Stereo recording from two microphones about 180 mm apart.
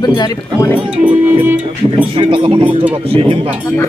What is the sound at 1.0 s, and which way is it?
Speech, 10° right (ahead or behind).